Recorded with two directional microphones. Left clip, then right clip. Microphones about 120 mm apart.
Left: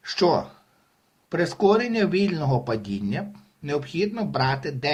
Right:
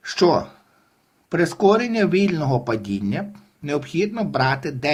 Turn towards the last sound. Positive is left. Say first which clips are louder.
# right 4 dB
turn(degrees=-40)  # may be behind; listen again after turning